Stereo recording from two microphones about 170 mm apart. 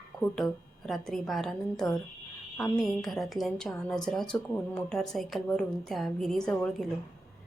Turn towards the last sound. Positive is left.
turn(degrees=5)  # may be behind; listen again after turning